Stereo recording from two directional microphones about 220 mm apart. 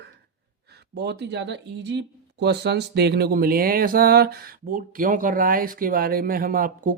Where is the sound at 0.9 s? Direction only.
50° right (ahead or behind).